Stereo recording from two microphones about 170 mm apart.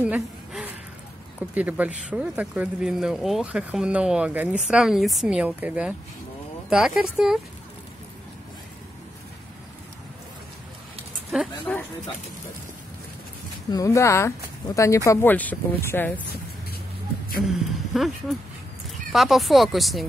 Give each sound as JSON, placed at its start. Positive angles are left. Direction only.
{"t": 0.0, "sound": "a sound", "side_deg": -5}
{"t": 1.5, "sound": "speech", "side_deg": -10}
{"t": 11.7, "sound": "speech", "side_deg": 5}
{"t": 13.7, "sound": "speech", "side_deg": 20}
{"t": 17.5, "sound": "a woman's voice", "side_deg": 0}
{"t": 19.1, "sound": "speech", "side_deg": 0}